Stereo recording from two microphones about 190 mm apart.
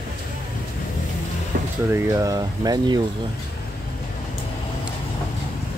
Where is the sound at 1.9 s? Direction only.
15° right (ahead or behind).